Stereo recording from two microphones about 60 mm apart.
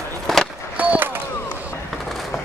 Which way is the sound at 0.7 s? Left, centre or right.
Right.